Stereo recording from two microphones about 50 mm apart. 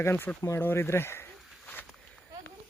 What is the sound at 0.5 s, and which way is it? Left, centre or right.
Speech, left.